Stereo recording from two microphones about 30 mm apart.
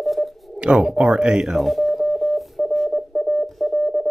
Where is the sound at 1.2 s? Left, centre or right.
Right.